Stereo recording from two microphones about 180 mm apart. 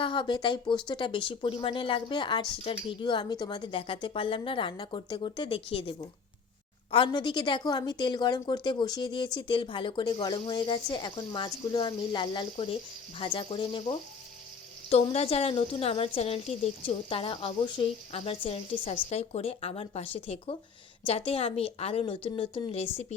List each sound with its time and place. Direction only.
0.0 s a woman's voice: 25° left (ahead or behind)